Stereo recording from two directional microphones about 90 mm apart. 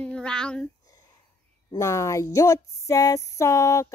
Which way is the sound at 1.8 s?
35° left (ahead or behind).